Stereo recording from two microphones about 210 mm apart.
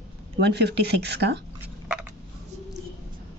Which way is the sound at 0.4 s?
50° right (ahead or behind).